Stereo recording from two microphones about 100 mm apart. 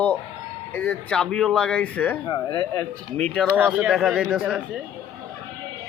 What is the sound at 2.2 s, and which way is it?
Speech, 45° left (ahead or behind).